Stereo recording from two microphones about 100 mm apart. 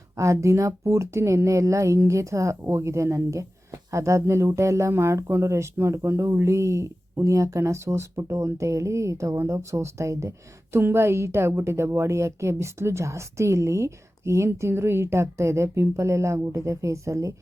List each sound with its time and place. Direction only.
0.2 s speech: 30° right (ahead or behind)